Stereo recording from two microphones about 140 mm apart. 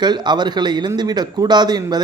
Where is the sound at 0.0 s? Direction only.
30° right (ahead or behind).